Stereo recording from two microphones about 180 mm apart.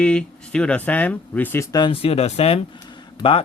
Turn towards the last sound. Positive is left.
turn(degrees=30)  # may be behind; listen again after turning